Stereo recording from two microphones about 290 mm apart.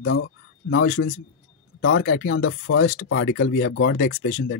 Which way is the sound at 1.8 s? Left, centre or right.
Left.